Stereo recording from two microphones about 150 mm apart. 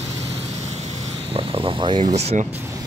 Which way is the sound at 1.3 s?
35° right (ahead or behind).